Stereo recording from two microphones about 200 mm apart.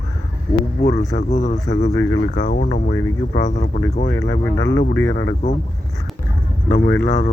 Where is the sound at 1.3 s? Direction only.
35° left (ahead or behind).